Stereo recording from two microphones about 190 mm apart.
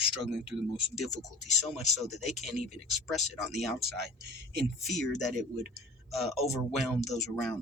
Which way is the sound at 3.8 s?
55° right (ahead or behind).